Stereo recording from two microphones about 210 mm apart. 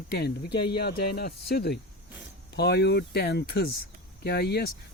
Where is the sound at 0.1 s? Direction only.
50° left (ahead or behind).